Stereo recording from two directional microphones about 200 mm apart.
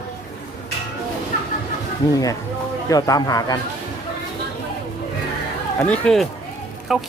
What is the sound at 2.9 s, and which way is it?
Speech, 20° left (ahead or behind).